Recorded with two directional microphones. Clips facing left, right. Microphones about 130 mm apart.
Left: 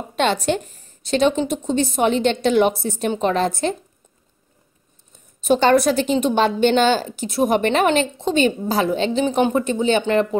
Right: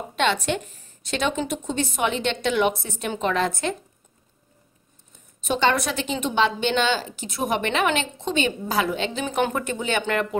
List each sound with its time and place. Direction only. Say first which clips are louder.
0.1 s a woman's voice: left 4 dB; 40° left (ahead or behind)
5.4 s a woman's voice: left 7 dB; 40° left (ahead or behind)